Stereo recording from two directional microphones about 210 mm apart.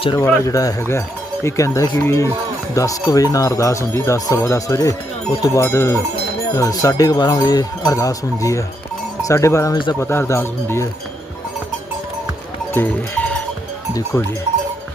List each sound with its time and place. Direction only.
0.2 s speech: 15° left (ahead or behind)
12.7 s cowbell: 10° left (ahead or behind)
13.9 s speech: 15° left (ahead or behind)